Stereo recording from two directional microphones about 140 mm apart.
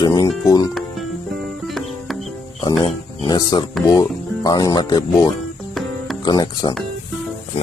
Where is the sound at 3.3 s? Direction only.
30° left (ahead or behind).